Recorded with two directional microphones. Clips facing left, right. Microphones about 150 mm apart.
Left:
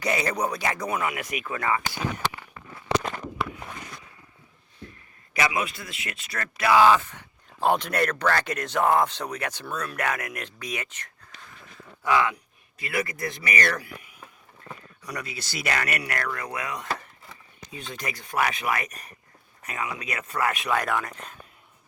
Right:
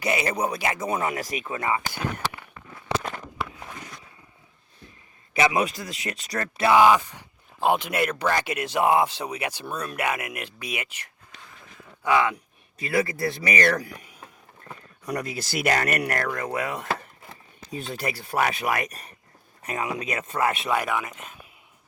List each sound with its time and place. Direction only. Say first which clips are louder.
0.0 s speech: right 1 dB; 5° right (ahead or behind)
5.5 s speech: right 4 dB; 40° right (ahead or behind)
13.7 s speech: right 4 dB; 40° right (ahead or behind); by 20.7 s 25° right (ahead or behind)
20.8 s speech: even; 5° right (ahead or behind)